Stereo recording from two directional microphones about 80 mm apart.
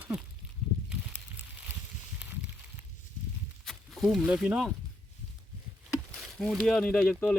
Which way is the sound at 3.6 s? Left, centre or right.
Centre.